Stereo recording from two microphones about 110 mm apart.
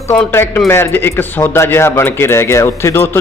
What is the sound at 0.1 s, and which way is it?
A man's voice, 20° left (ahead or behind).